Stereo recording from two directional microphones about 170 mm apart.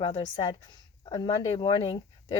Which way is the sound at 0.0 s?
25° left (ahead or behind).